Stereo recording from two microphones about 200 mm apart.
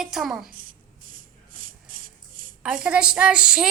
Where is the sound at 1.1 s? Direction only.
45° right (ahead or behind).